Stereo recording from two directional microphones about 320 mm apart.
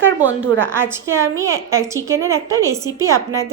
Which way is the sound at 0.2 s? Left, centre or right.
Centre.